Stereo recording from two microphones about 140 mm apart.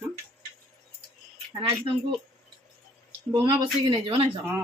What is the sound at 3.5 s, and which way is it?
Speech, 35° right (ahead or behind).